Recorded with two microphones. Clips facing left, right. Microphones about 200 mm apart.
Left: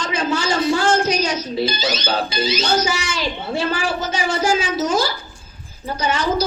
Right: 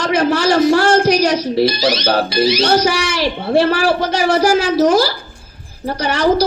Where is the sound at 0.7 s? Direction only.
65° right (ahead or behind).